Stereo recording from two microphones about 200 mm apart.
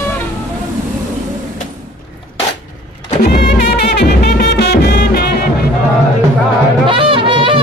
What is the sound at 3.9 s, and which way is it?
Music, 55° left (ahead or behind).